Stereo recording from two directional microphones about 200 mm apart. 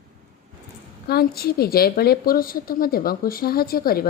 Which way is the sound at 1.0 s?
50° left (ahead or behind).